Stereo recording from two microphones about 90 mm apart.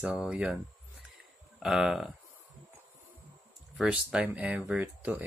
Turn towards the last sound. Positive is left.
turn(degrees=-15)  # may be behind; listen again after turning